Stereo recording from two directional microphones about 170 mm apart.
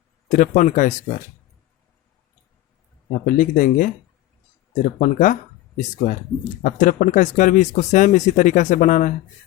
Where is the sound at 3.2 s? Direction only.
55° left (ahead or behind).